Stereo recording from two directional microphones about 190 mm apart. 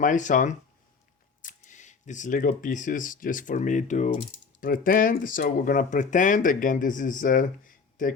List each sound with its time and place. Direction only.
0.0 s speech: 40° left (ahead or behind)